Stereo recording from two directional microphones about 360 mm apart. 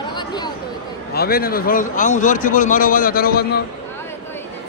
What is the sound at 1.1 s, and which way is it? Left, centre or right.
A man's voice, left.